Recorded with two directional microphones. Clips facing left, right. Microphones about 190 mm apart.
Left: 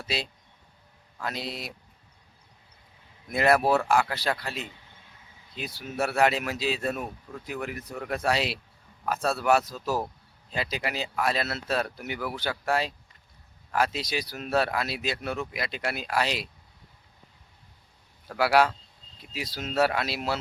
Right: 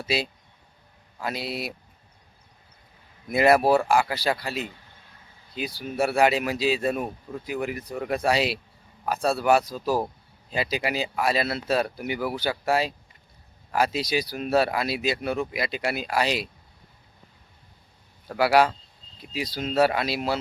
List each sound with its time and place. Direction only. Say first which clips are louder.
0.0 s speech: right 5 dB; 5° right (ahead or behind)
3.2 s speech: right 4 dB; 5° right (ahead or behind)
18.3 s speech: right 2 dB; centre (ahead or behind)